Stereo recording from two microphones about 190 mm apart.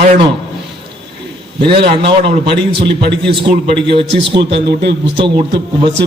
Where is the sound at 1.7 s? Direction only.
60° right (ahead or behind).